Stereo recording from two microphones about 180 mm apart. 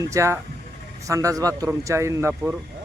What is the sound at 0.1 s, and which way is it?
Speech, 15° right (ahead or behind).